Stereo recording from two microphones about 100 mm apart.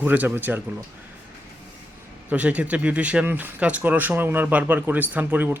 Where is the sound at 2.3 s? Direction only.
15° right (ahead or behind).